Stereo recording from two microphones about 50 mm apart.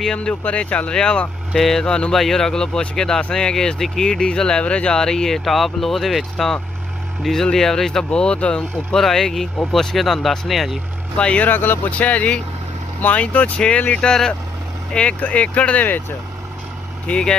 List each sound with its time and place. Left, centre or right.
0.0 s speech: centre
0.4 s speech: left
9.0 s speech: centre
11.1 s speech: left
11.5 s speech: left
12.0 s speech: left
14.0 s speech: centre
14.9 s speech: left
17.1 s speech: centre